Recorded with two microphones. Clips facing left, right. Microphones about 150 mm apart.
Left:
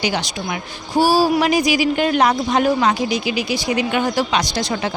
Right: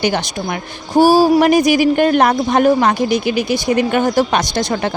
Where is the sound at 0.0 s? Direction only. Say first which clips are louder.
Right 4 dB; 50° right (ahead or behind).